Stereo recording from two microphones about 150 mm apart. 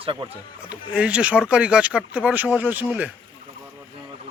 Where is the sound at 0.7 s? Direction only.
10° right (ahead or behind).